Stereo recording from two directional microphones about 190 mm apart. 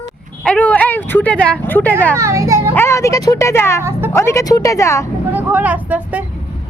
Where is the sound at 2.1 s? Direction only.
15° right (ahead or behind).